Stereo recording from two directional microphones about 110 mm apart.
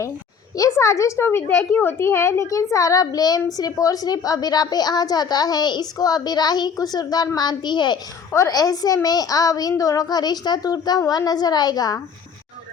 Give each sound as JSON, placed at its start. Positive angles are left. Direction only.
{"t": 0.5, "sound": "a woman's voice", "side_deg": 30}